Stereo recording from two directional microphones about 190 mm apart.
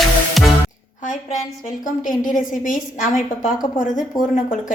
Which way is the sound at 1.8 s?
45° left (ahead or behind).